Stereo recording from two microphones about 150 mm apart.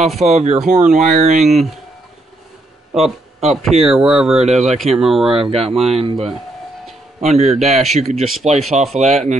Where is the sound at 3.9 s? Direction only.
5° right (ahead or behind).